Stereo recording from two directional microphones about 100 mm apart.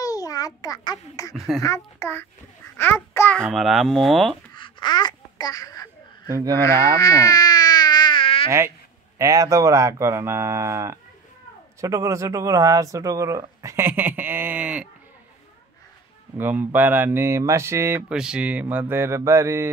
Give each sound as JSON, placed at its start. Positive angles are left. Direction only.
{"t": 0.0, "sound": "a sound", "side_deg": 35}
{"t": 0.6, "sound": "a child's voice", "side_deg": 35}
{"t": 1.3, "sound": "speech", "side_deg": 0}
{"t": 1.6, "sound": "a child's voice", "side_deg": 30}
{"t": 3.5, "sound": "speech", "side_deg": 0}
{"t": 4.6, "sound": "babbling", "side_deg": 55}
{"t": 6.5, "sound": "baby cry", "side_deg": 30}
{"t": 8.5, "sound": "speech", "side_deg": -25}
{"t": 16.3, "sound": "speech", "side_deg": -20}
{"t": 18.0, "sound": "speech", "side_deg": -10}